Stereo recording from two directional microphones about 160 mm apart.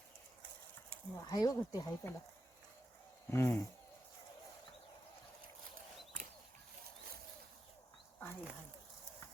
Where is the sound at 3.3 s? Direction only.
15° left (ahead or behind).